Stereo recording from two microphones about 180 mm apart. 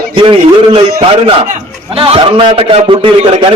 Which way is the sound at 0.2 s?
30° right (ahead or behind).